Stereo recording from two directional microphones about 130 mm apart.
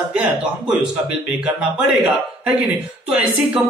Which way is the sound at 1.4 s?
5° right (ahead or behind).